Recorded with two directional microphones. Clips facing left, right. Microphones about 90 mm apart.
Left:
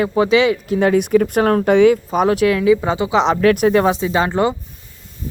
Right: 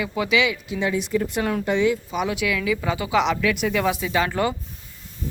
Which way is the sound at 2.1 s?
40° left (ahead or behind).